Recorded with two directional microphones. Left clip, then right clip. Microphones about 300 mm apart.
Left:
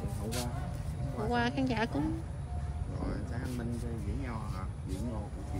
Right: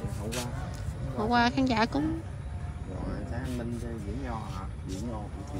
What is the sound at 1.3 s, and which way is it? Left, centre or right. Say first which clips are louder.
Speech: right 7 dB; centre.